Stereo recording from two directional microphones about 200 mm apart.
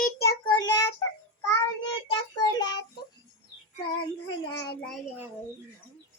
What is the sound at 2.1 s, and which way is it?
Child singing, 20° left (ahead or behind).